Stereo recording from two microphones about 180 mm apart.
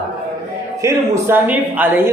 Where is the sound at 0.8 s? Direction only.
15° right (ahead or behind).